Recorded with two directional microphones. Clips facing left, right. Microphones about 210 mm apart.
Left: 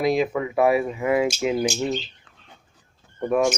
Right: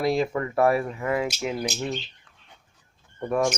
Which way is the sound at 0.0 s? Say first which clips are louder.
Left 2 dB; 20° left (ahead or behind).